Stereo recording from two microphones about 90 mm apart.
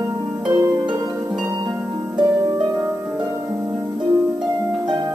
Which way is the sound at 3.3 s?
30° right (ahead or behind).